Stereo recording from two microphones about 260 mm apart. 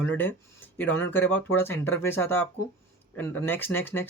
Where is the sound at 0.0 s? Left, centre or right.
Centre.